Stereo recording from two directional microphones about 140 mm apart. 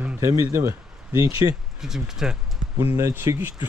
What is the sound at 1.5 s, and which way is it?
Speech, 5° right (ahead or behind).